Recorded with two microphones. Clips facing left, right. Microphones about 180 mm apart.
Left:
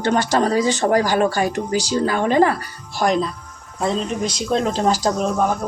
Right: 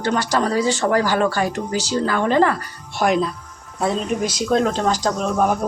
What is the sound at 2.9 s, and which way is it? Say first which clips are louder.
Speech: even; 5° right (ahead or behind).